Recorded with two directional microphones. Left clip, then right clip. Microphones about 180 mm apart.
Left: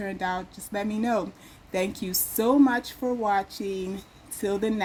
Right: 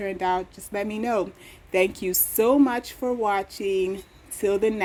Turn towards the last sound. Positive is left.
turn(degrees=-30)  # may be behind; listen again after turning